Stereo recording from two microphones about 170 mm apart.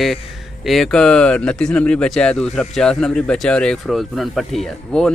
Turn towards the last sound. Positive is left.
turn(degrees=5)  # may be behind; listen again after turning